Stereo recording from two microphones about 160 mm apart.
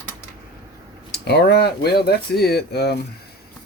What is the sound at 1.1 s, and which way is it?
Speech, 85° left.